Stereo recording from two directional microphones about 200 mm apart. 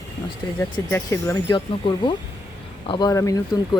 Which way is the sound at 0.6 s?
15° left (ahead or behind).